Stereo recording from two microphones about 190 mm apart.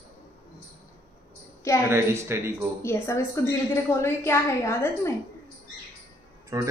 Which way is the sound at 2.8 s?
15° left (ahead or behind).